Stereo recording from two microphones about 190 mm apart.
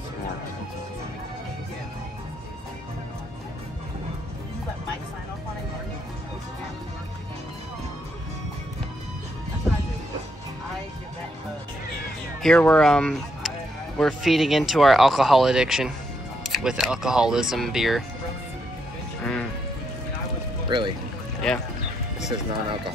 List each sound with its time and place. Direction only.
12.4 s speech: 5° left (ahead or behind)
20.7 s speech: 25° right (ahead or behind)
21.4 s speech: centre (ahead or behind)
22.3 s speech: 25° right (ahead or behind)